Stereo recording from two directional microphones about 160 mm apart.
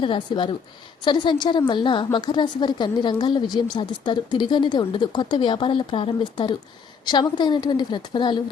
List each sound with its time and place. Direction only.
0.0 s a woman's voice: 30° left (ahead or behind)